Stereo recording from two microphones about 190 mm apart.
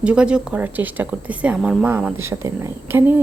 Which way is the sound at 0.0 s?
5° right (ahead or behind).